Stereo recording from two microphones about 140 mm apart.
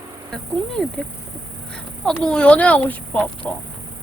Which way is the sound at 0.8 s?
5° left (ahead or behind).